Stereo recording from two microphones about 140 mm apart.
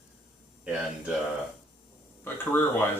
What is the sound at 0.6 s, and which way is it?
Speech, 5° right (ahead or behind).